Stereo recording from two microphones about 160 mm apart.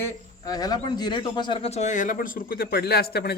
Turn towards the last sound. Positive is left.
turn(degrees=85)